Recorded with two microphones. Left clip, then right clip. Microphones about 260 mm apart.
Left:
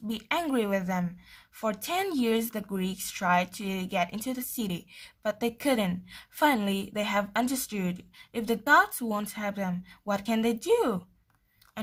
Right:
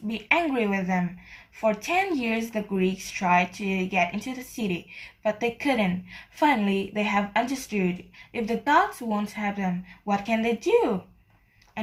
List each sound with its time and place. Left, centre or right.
0.3 s speech: left